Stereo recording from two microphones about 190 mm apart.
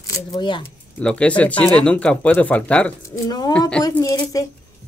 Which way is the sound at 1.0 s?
5° left (ahead or behind).